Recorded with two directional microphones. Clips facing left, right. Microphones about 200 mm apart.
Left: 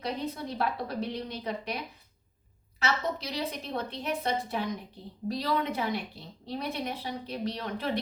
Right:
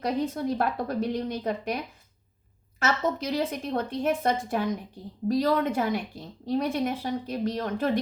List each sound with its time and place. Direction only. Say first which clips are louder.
0.0 s a woman's voice: right 6 dB; 50° right (ahead or behind)